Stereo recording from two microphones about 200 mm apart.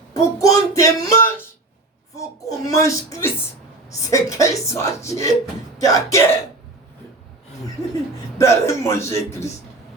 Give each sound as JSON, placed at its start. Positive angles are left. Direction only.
{"t": 0.1, "sound": "speech", "side_deg": 15}
{"t": 8.4, "sound": "speech", "side_deg": 15}